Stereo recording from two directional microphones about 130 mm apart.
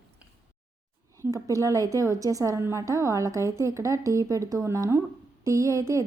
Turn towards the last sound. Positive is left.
turn(degrees=-25)  # may be behind; listen again after turning